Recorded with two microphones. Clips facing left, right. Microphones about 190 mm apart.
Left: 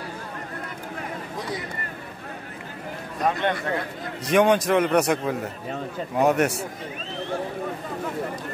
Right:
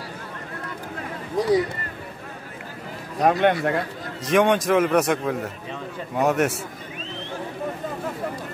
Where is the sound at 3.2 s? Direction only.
60° right (ahead or behind).